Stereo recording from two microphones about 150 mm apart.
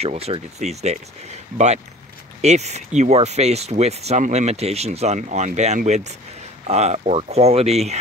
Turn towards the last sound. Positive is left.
turn(degrees=-45)  # may be behind; listen again after turning